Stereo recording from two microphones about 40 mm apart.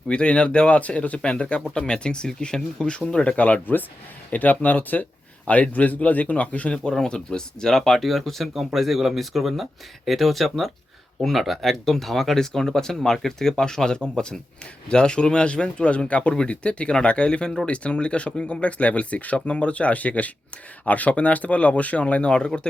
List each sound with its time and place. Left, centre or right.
0.1 s speech: left
6.9 s speech: centre